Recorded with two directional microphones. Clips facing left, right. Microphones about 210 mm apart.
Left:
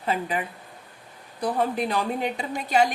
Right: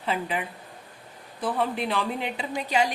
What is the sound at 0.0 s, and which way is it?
Speech, 45° left (ahead or behind).